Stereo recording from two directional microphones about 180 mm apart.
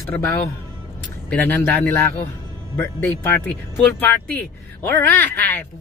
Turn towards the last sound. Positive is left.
turn(degrees=10)  # may be behind; listen again after turning